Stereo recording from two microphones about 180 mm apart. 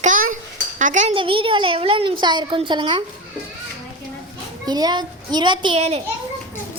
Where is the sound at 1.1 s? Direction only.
30° right (ahead or behind).